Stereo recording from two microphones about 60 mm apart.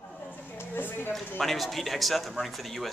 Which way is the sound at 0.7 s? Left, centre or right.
Left.